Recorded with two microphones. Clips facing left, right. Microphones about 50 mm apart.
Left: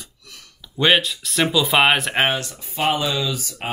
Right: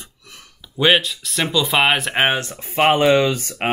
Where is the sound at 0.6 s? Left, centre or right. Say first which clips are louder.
Right 1 dB; centre.